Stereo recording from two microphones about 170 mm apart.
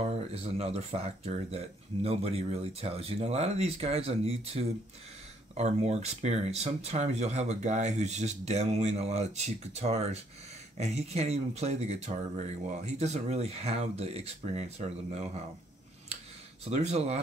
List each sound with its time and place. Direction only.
0.0 s speech: 35° right (ahead or behind)
16.6 s speech: 40° right (ahead or behind)